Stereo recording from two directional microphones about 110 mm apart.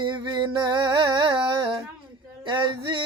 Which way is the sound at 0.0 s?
45° right (ahead or behind).